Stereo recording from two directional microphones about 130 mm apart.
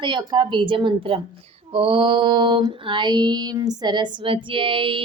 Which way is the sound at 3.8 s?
35° right (ahead or behind).